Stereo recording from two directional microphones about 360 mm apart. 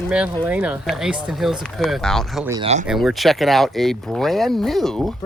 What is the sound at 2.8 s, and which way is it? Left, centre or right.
Speech, centre.